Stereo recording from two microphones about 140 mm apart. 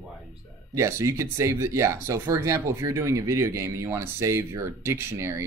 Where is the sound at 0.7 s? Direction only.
20° right (ahead or behind).